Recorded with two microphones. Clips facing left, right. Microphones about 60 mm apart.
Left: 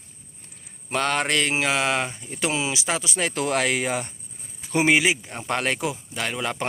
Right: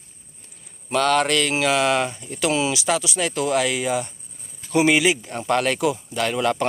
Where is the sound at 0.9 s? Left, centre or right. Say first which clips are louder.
Right 4 dB; left.